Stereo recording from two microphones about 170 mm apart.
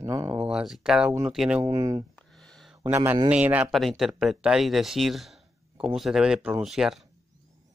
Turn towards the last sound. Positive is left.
turn(degrees=0)  # may be behind; listen again after turning